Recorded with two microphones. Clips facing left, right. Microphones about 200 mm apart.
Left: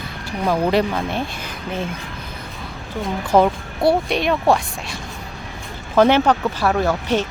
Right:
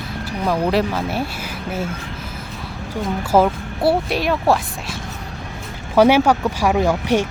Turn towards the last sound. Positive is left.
turn(degrees=-15)  # may be behind; listen again after turning